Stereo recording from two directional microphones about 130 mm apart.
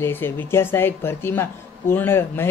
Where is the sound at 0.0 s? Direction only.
15° left (ahead or behind).